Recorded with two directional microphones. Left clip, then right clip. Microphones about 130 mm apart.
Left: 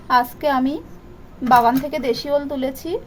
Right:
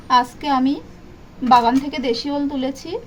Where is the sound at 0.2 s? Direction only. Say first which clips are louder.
Even; 65° left (ahead or behind).